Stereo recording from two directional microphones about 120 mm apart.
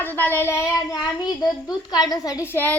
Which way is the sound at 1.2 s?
35° left (ahead or behind).